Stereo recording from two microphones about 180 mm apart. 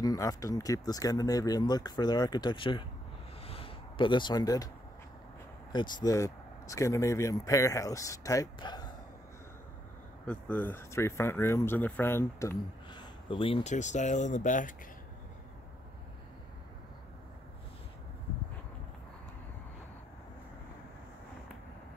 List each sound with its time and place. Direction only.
0.0 s speech: 20° left (ahead or behind)
3.4 s a sound: 30° left (ahead or behind)
5.7 s speech: 25° left (ahead or behind)
10.2 s speech: 5° left (ahead or behind)
13.3 s speech: 30° left (ahead or behind); by 14.8 s 45° left (ahead or behind)